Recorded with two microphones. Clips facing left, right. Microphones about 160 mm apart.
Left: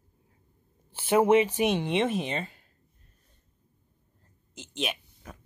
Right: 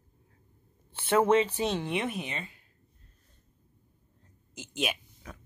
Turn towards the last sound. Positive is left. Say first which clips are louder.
# even
turn(degrees=0)  # may be behind; listen again after turning